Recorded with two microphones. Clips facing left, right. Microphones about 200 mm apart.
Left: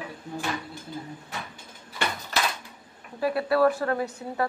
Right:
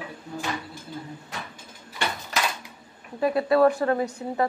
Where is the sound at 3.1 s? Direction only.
20° right (ahead or behind).